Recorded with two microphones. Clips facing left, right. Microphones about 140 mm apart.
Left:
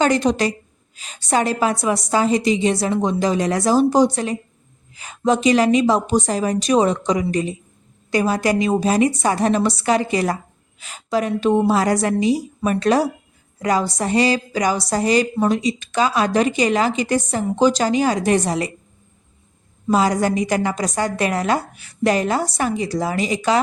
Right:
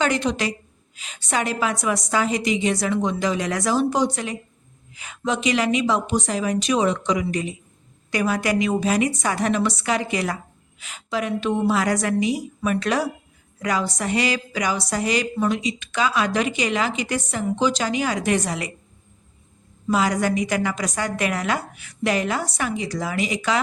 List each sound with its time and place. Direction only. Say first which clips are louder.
0.0 s a woman's voice: left 5 dB; 40° left (ahead or behind)
19.9 s a woman's voice: left 3 dB; 35° left (ahead or behind)